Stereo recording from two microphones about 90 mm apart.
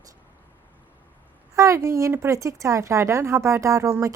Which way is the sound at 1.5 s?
35° right (ahead or behind).